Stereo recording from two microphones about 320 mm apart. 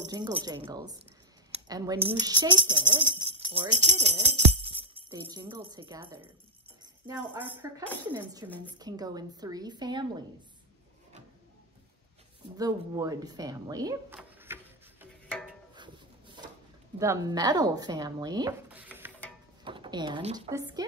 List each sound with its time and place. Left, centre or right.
0.0 s a woman's voice: centre
1.5 s a sound: centre
2.0 s a woman's voice: centre
12.5 s speech: centre
15.2 s a sound: centre
15.7 s music: centre
17.0 s speech: centre